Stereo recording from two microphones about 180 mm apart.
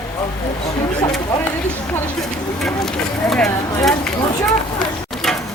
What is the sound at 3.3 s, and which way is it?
Speech, 5° left (ahead or behind).